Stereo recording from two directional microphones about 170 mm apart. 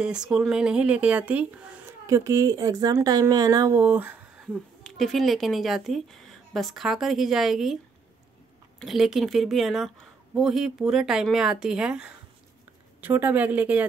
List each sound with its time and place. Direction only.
0.0 s a woman's voice: 5° right (ahead or behind)
8.7 s a woman's voice: centre (ahead or behind)